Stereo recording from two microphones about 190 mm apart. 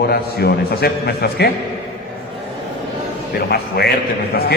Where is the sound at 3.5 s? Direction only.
55° left (ahead or behind).